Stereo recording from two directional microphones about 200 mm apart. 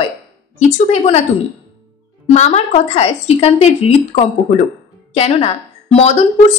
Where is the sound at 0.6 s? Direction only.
35° left (ahead or behind).